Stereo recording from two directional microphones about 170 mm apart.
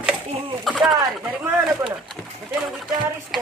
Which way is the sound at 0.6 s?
Centre (ahead or behind).